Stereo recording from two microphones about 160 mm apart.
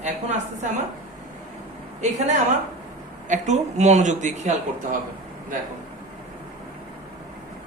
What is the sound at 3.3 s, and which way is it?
A woman's voice, 45° right (ahead or behind).